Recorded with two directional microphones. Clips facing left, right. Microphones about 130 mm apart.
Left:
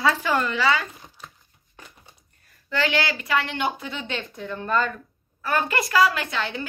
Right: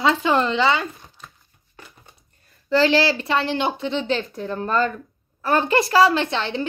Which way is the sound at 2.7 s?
30° right (ahead or behind).